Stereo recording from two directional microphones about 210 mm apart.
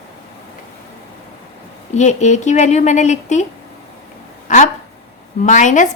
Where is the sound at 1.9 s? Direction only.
35° left (ahead or behind).